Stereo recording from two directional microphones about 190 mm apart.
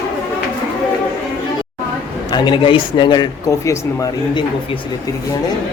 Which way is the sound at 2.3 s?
25° left (ahead or behind).